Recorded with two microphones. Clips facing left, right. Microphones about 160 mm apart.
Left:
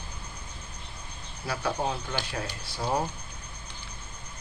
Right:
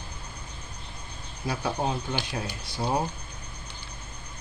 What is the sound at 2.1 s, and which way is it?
Speech, 15° right (ahead or behind).